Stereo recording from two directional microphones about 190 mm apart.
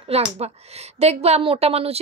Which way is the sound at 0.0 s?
30° right (ahead or behind).